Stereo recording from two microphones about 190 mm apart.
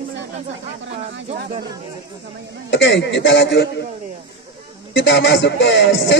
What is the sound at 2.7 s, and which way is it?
Speech, 70° left (ahead or behind).